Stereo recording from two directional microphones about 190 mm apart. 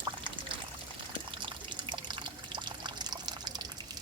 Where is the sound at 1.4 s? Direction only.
25° right (ahead or behind).